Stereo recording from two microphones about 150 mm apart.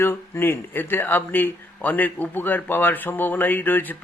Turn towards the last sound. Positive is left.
turn(degrees=10)  # may be behind; listen again after turning